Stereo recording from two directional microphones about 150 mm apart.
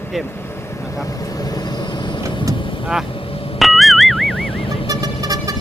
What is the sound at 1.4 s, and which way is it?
Vehicle, 25° left (ahead or behind).